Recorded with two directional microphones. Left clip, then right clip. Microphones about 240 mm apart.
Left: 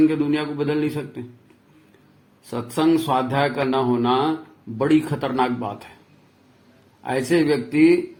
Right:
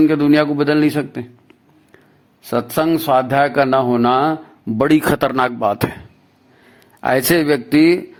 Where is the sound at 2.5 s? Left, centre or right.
Right.